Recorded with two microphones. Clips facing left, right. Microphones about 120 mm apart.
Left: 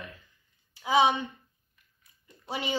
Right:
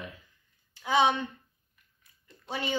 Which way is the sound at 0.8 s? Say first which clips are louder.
Left 1 dB; 10° left (ahead or behind).